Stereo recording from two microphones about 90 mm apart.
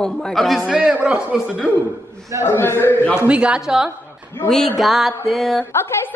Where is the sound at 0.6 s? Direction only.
15° right (ahead or behind).